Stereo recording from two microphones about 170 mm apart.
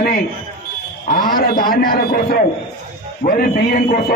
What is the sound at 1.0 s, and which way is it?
A man's voice, 55° left (ahead or behind).